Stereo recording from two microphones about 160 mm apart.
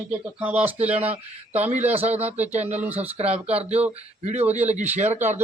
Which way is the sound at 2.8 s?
10° right (ahead or behind).